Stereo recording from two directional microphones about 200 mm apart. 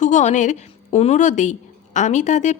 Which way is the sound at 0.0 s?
40° left (ahead or behind).